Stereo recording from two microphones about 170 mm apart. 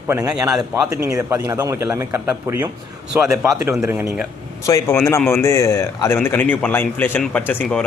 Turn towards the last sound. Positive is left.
turn(degrees=10)  # may be behind; listen again after turning